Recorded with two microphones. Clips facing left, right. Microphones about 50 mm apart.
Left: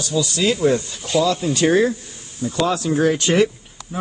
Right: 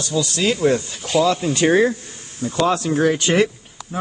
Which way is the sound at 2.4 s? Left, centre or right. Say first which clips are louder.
Even; right.